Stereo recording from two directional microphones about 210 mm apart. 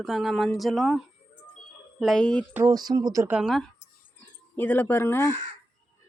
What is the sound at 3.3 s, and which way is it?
Speech, centre (ahead or behind).